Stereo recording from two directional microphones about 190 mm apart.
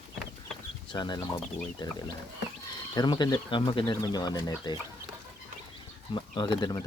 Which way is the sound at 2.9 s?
20° left (ahead or behind).